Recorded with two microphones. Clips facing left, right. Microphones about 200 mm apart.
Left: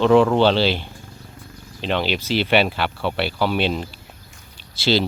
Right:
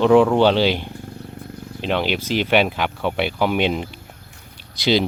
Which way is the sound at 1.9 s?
10° right (ahead or behind).